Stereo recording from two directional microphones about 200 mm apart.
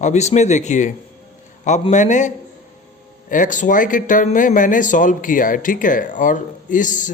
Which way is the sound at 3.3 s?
40° left (ahead or behind).